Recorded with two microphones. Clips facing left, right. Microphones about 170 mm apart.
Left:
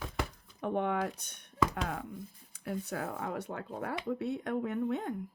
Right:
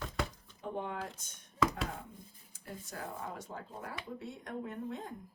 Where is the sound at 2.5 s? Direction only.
65° left (ahead or behind).